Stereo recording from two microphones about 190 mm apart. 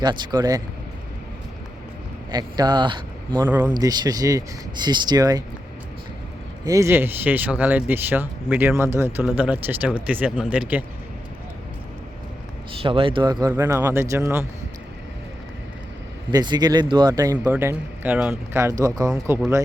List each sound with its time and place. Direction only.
0.0 s speech: 20° right (ahead or behind)
2.3 s speech: 20° right (ahead or behind)
6.7 s speech: 15° right (ahead or behind)
12.8 s speech: 30° right (ahead or behind)
13.5 s speech: 10° right (ahead or behind)
16.3 s speech: 20° right (ahead or behind)